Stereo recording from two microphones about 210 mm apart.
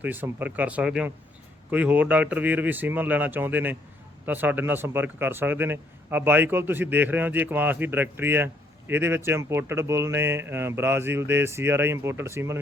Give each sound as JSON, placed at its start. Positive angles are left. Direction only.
{"t": 0.0, "sound": "speech", "side_deg": -10}